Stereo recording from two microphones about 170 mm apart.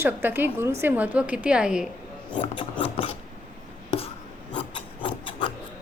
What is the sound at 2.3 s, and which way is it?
Filing, 30° left (ahead or behind).